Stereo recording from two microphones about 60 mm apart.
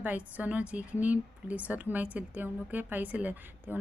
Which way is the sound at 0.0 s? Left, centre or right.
Right.